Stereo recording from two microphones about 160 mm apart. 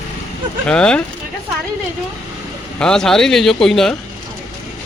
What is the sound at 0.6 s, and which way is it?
Speech, 5° left (ahead or behind).